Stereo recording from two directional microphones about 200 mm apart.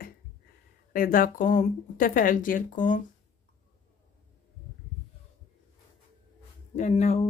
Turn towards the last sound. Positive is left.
turn(degrees=30)  # may be behind; listen again after turning